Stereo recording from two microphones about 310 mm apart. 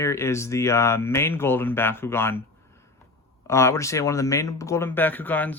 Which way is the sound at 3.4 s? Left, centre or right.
Centre.